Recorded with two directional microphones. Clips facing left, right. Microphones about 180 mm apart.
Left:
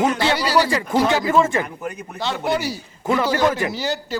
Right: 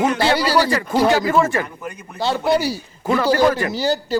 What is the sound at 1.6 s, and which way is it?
Speech, 20° left (ahead or behind).